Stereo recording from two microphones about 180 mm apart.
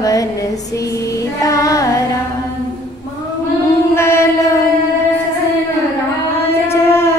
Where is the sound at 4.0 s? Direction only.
15° left (ahead or behind).